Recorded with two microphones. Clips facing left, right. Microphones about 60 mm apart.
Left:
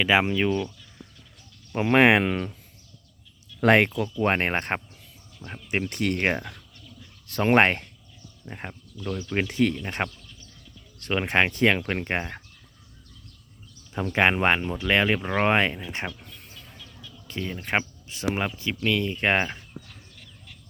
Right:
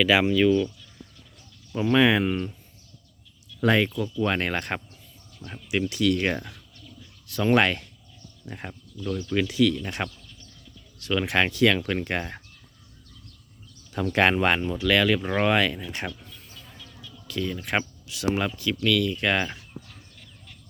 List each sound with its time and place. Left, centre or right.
0.0 s speech: left
1.7 s speech: left
2.3 s speech: left
3.6 s speech: left
4.2 s speech: left
8.4 s speech: left
9.3 s speech: left
9.7 s speech: left
13.9 s speech: centre
15.2 s speech: centre
15.4 s speech: left
17.2 s speech: left